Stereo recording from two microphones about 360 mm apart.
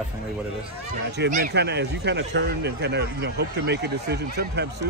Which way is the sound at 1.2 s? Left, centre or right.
Right.